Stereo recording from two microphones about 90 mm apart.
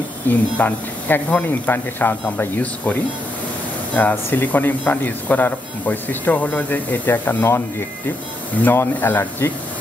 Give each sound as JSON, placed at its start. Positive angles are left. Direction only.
{"t": 0.3, "sound": "speech", "side_deg": 20}
{"t": 8.6, "sound": "speech", "side_deg": 20}